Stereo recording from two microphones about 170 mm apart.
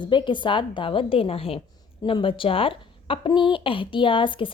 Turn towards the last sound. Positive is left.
turn(degrees=30)  # may be behind; listen again after turning